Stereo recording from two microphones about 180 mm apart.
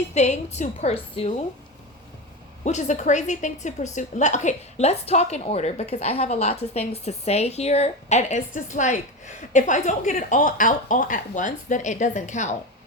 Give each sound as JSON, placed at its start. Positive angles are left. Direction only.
{"t": 0.1, "sound": "a woman's voice", "side_deg": 40}
{"t": 2.6, "sound": "a woman's voice", "side_deg": 40}